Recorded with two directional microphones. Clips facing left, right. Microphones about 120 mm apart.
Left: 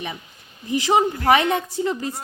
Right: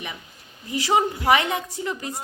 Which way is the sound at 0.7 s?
25° left (ahead or behind).